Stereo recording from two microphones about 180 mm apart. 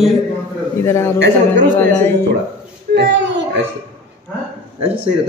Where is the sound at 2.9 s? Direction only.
75° right (ahead or behind).